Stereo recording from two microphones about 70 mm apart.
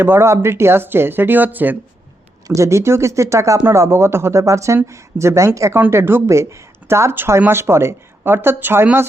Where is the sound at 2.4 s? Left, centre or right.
Right.